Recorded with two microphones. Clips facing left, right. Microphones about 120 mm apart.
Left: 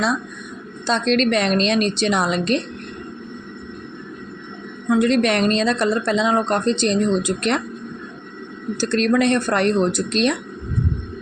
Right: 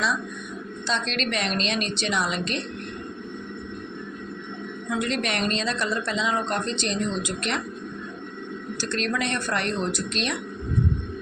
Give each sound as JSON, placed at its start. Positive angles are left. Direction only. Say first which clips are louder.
{"t": 0.9, "sound": "speech", "louder": "left 10 dB", "side_deg": 40}
{"t": 4.9, "sound": "speech", "louder": "left 10 dB", "side_deg": 40}
{"t": 8.9, "sound": "speech", "louder": "left 10 dB", "side_deg": 40}